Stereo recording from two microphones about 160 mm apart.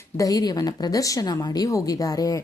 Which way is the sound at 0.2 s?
25° left (ahead or behind).